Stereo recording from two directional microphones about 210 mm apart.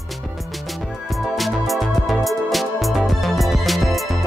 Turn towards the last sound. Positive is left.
turn(degrees=0)  # may be behind; listen again after turning